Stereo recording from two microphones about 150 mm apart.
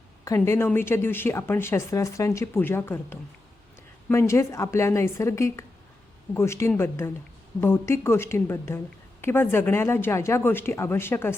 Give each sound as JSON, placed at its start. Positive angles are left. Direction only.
{"t": 0.3, "sound": "a woman's voice", "side_deg": 20}